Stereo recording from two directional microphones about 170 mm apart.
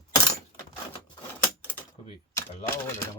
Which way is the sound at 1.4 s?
10° left (ahead or behind).